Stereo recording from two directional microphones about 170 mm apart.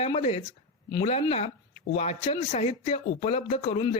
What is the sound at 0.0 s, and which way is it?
Speech, 35° left (ahead or behind).